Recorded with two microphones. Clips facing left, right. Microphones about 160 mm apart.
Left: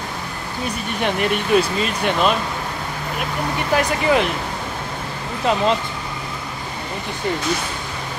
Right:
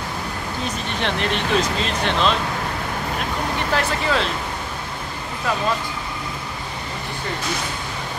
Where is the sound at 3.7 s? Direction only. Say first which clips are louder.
Left 5 dB; 15° left (ahead or behind).